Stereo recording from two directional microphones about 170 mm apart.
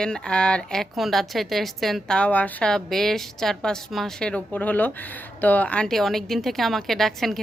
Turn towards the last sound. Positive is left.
turn(degrees=0)  # may be behind; listen again after turning